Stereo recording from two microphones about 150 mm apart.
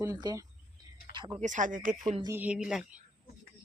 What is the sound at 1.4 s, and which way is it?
Speech, 55° right (ahead or behind).